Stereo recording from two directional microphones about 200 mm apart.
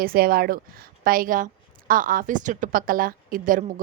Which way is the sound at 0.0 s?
45° right (ahead or behind).